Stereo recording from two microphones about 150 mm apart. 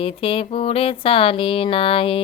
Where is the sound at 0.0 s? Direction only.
40° left (ahead or behind).